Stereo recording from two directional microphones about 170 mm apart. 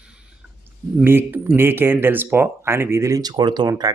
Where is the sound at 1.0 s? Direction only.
10° right (ahead or behind).